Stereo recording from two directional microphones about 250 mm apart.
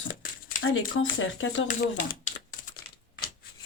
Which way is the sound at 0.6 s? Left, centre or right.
Left.